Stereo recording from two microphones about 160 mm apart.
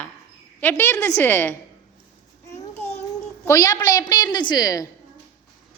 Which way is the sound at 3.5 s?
20° left (ahead or behind).